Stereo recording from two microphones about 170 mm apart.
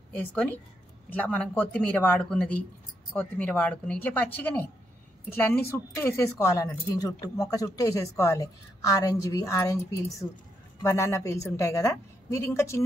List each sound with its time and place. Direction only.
0.3 s a woman's voice: 5° left (ahead or behind)